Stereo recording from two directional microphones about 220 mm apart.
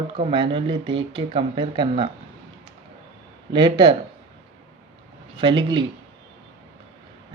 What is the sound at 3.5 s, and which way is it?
Speech, 20° right (ahead or behind).